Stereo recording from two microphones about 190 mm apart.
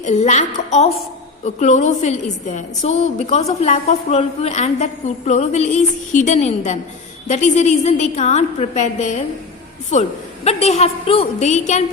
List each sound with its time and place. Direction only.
0.0 s a woman's voice: 40° left (ahead or behind)